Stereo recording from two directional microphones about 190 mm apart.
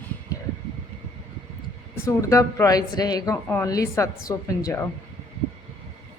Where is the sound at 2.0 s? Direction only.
15° left (ahead or behind).